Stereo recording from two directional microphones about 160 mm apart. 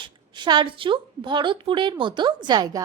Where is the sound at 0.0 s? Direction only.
30° right (ahead or behind).